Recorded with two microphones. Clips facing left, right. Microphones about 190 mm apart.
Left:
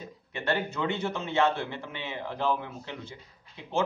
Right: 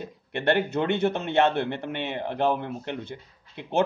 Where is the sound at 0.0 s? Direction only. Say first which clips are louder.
Right 7 dB; 70° right (ahead or behind).